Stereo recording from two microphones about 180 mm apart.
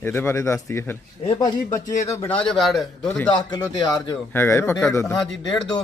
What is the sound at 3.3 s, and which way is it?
A man's voice, 25° left (ahead or behind).